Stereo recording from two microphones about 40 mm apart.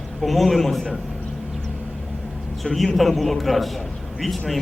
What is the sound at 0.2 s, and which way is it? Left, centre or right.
Speech, centre.